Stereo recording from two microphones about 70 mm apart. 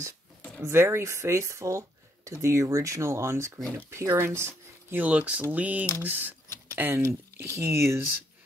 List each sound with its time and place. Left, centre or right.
0.6 s speech: right
5.0 s speech: centre
6.7 s a sound: right
7.0 s speech: right